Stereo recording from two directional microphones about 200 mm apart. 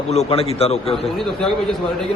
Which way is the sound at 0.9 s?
Centre (ahead or behind).